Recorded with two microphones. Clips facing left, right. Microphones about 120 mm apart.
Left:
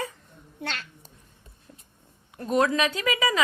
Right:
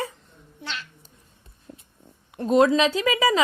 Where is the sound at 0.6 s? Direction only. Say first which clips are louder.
Left 1 dB; 50° left (ahead or behind).